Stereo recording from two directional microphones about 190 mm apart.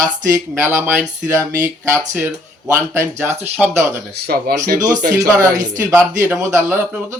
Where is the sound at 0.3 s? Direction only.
15° right (ahead or behind).